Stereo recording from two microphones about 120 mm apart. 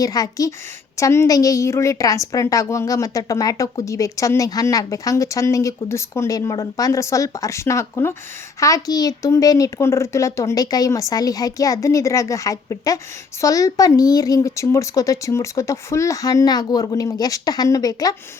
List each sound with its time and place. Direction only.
0.0 s a woman's voice: 30° left (ahead or behind)